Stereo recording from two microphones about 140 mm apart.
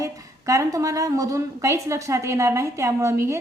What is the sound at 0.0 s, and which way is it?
A woman's voice, 25° right (ahead or behind).